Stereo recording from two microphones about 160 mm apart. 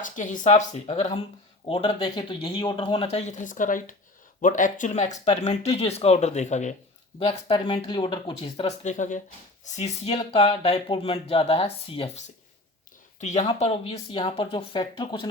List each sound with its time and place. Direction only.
0.0 s speech: 55° left (ahead or behind)
7.2 s speech: 35° left (ahead or behind)